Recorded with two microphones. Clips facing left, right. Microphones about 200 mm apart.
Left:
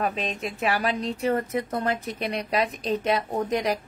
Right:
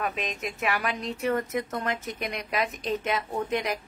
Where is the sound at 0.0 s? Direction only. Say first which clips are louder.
Left 3 dB; 30° left (ahead or behind).